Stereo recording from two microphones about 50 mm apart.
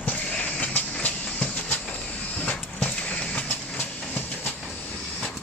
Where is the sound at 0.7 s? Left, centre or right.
Left.